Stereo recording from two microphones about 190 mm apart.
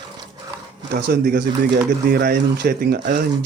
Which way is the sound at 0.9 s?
55° right (ahead or behind).